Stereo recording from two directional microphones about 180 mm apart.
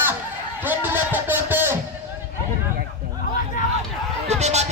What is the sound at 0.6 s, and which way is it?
Music, 10° right (ahead or behind).